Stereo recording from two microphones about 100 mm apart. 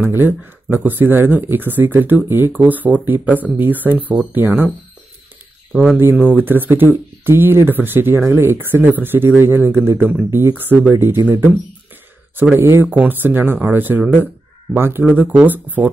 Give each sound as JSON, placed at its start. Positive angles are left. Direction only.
{"t": 0.0, "sound": "speech", "side_deg": -20}
{"t": 5.7, "sound": "speech", "side_deg": 0}
{"t": 6.2, "sound": "speech", "side_deg": -20}
{"t": 12.5, "sound": "speech", "side_deg": -20}
{"t": 15.0, "sound": "speech", "side_deg": -15}